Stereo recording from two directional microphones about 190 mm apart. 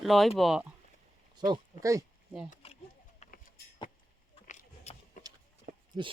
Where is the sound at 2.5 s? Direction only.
30° left (ahead or behind).